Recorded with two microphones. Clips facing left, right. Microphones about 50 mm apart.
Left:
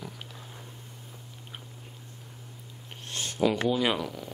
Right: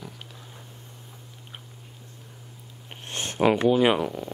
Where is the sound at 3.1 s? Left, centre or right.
Right.